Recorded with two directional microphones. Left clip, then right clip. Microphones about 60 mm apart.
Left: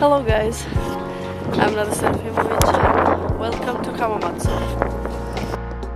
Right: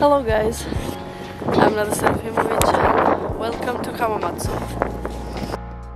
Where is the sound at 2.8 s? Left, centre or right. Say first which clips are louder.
Even; right.